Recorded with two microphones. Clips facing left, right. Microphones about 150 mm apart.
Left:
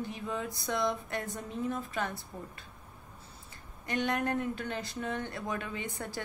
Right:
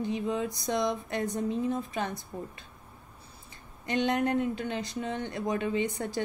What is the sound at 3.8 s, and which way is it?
Speech, 20° right (ahead or behind).